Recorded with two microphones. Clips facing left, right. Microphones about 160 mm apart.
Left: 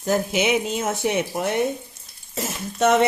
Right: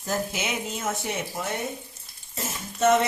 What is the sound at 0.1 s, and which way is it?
Speech, 70° left (ahead or behind).